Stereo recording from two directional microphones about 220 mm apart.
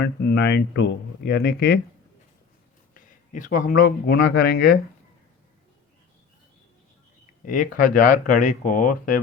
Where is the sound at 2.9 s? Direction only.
35° left (ahead or behind).